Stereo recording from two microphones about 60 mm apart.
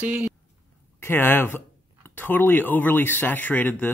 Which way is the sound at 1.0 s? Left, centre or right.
Left.